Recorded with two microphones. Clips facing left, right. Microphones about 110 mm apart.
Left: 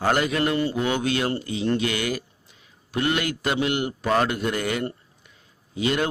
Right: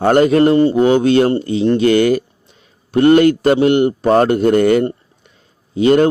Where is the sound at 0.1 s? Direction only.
45° right (ahead or behind).